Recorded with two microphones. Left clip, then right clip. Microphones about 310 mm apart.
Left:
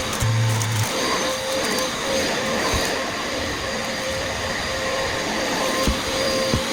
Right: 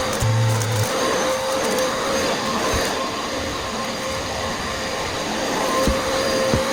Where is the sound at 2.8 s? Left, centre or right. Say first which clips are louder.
Right 1 dB; centre.